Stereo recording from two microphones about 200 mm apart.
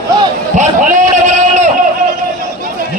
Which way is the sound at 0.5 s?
40° right (ahead or behind).